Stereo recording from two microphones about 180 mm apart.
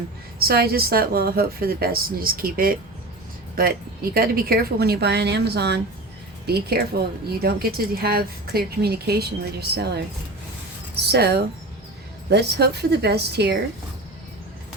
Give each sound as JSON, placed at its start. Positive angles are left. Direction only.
{"t": 0.3, "sound": "speech", "side_deg": -60}
{"t": 11.1, "sound": "speech", "side_deg": -65}